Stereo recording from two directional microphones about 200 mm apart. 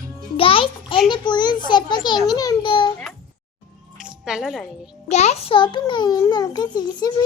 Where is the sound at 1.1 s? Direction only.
20° left (ahead or behind).